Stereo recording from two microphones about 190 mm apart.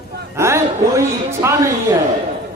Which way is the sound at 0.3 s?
15° right (ahead or behind).